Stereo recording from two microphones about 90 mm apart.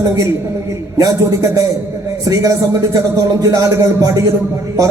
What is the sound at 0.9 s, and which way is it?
A man's voice, 35° right (ahead or behind).